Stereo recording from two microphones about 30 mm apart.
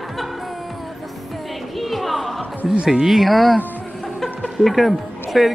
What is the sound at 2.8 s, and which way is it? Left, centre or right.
Speech, right.